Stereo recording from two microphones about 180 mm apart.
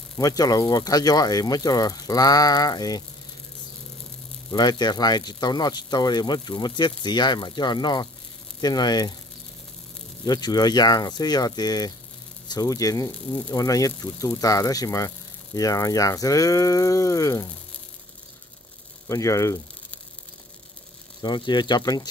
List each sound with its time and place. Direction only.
0.2 s speech: 20° left (ahead or behind)
4.5 s speech: 25° left (ahead or behind)
10.2 s speech: 20° left (ahead or behind)
19.0 s speech: 15° left (ahead or behind)
21.2 s speech: 25° left (ahead or behind)